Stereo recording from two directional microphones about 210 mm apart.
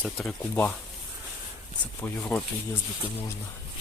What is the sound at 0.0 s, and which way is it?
Speech, centre (ahead or behind).